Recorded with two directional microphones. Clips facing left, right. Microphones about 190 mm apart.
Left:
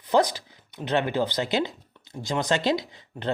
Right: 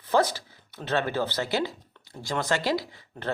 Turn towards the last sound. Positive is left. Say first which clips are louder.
# left 3 dB
turn(degrees=20)  # may be behind; listen again after turning